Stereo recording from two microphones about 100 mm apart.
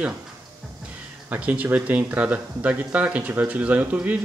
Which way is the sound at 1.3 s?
15° right (ahead or behind).